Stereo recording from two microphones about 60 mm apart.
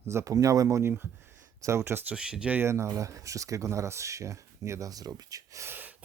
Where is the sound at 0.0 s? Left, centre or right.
Right.